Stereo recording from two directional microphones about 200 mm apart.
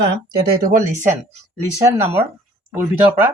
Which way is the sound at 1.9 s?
15° right (ahead or behind).